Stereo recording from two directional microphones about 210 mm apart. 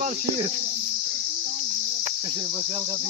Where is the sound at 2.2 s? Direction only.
15° right (ahead or behind).